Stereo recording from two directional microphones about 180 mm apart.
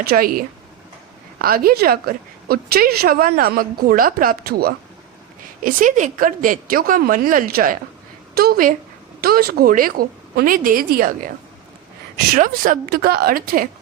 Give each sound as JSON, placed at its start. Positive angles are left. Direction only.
{"t": 0.0, "sound": "a woman's voice", "side_deg": -55}
{"t": 5.6, "sound": "a woman's voice", "side_deg": -45}
{"t": 12.3, "sound": "a woman's voice", "side_deg": -50}